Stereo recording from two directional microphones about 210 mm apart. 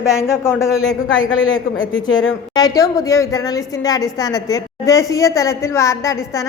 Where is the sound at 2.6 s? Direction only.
15° left (ahead or behind).